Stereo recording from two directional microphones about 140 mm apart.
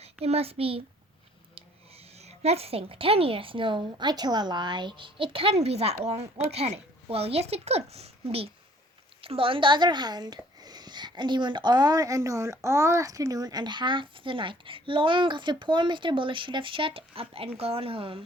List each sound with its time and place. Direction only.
0.0 s a child's voice: 45° right (ahead or behind)